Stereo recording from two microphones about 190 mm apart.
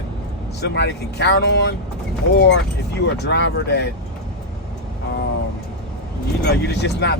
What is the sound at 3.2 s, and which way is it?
Speech, 65° left (ahead or behind).